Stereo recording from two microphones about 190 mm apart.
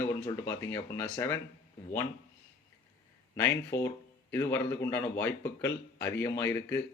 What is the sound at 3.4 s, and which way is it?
Speech, 15° left (ahead or behind).